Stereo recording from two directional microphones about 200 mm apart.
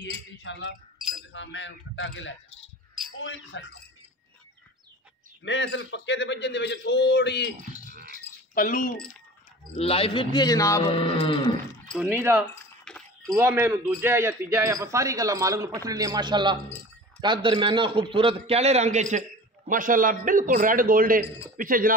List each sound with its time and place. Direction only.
0.0 s a man's voice: 65° left (ahead or behind)
5.4 s a man's voice: 65° left (ahead or behind)
8.1 s a sound: 40° left (ahead or behind)
9.8 s a man's voice: 30° left (ahead or behind)
10.8 s a man's voice: 30° left (ahead or behind)
12.0 s a man's voice: 10° right (ahead or behind)
12.8 s cowbell: 5° left (ahead or behind)
13.3 s a man's voice: 15° right (ahead or behind); by 21.9 s 45° right (ahead or behind)